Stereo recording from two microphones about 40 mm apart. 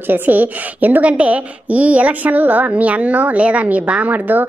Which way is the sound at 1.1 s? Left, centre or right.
Right.